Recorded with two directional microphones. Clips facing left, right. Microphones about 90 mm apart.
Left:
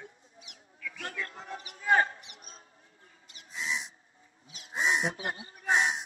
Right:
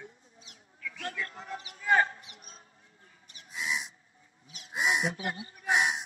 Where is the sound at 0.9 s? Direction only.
30° left (ahead or behind).